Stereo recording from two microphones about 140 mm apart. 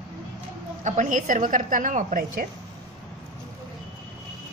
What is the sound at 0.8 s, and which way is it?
A woman's voice, 60° right (ahead or behind).